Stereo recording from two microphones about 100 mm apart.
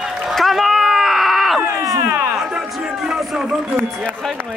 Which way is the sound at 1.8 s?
35° right (ahead or behind).